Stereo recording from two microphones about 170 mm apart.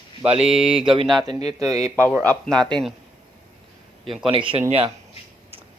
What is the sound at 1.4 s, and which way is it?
Speech, 40° left (ahead or behind).